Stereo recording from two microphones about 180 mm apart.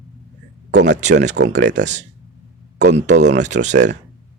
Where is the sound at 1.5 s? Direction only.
80° right.